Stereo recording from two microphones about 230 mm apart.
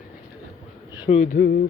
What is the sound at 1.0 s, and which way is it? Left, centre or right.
Speech, left.